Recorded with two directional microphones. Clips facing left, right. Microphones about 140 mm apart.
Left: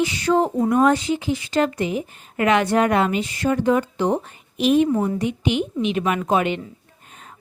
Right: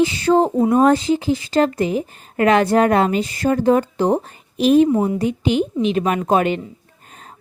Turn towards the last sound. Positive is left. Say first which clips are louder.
# right 2 dB
turn(degrees=-35)  # may be behind; listen again after turning